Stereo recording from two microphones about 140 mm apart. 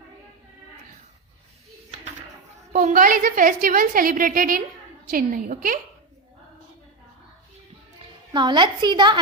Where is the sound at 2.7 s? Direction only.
70° right (ahead or behind).